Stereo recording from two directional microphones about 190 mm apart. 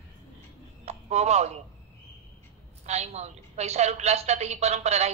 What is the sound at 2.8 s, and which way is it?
A woman's voice, 35° right (ahead or behind).